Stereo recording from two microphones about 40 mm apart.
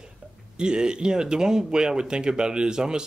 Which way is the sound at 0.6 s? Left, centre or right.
Right.